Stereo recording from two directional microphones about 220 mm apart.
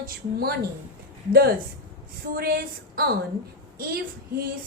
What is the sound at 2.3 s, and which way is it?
A woman's voice, 45° right (ahead or behind).